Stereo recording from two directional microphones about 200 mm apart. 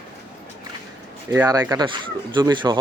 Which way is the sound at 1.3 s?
20° right (ahead or behind).